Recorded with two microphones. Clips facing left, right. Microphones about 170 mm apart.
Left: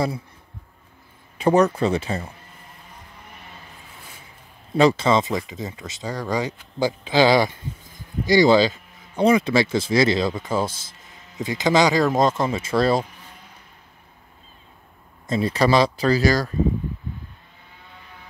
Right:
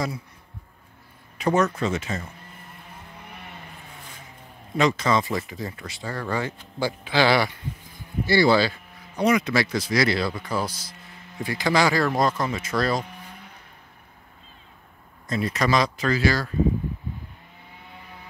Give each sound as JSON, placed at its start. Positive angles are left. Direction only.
{"t": 1.4, "sound": "speech", "side_deg": 35}
{"t": 4.7, "sound": "speech", "side_deg": 30}
{"t": 15.2, "sound": "speech", "side_deg": 25}